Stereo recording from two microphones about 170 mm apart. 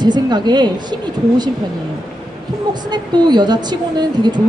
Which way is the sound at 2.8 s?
25° right (ahead or behind).